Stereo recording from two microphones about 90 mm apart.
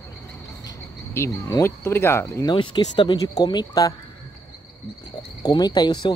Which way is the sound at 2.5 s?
60° left (ahead or behind).